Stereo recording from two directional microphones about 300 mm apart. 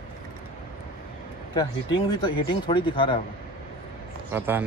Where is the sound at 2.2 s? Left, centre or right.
Centre.